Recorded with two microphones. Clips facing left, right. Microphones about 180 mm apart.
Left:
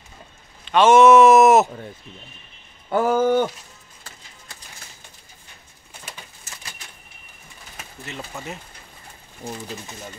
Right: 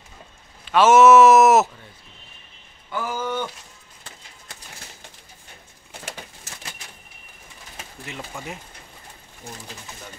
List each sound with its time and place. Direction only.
0.7 s speech: 5° right (ahead or behind)
2.9 s speech: 55° left (ahead or behind)
8.2 s speech: 5° left (ahead or behind)